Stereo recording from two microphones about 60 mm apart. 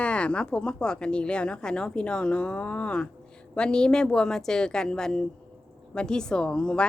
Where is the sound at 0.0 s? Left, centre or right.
Centre.